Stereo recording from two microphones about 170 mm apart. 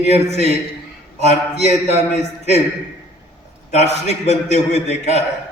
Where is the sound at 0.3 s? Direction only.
40° left (ahead or behind).